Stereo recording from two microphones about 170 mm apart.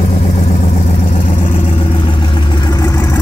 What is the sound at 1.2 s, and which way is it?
Vehicle, 50° left (ahead or behind).